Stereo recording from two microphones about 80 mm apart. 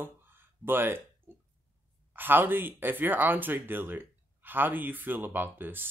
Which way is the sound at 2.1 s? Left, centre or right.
Right.